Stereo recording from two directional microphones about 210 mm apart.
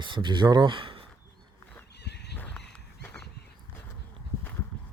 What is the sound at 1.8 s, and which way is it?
Horse, 50° left (ahead or behind).